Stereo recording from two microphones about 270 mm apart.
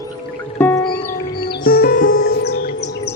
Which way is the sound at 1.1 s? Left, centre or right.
Left.